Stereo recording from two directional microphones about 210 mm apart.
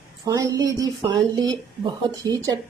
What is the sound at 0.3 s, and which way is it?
A woman's voice, 15° right (ahead or behind).